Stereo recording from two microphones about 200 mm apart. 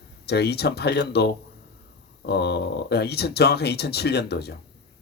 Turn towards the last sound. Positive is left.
turn(degrees=55)  # may be behind; listen again after turning